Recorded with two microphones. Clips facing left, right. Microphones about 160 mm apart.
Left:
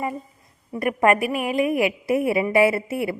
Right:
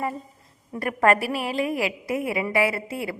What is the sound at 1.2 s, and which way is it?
Speech, 35° right (ahead or behind).